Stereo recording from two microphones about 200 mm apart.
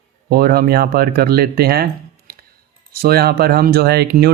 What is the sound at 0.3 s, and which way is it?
Speech, 50° right (ahead or behind).